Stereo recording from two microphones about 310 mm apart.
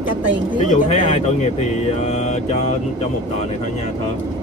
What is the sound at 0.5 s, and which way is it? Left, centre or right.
Speech, left.